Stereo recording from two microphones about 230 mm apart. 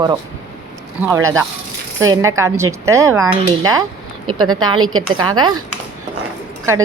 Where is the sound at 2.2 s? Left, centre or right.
Centre.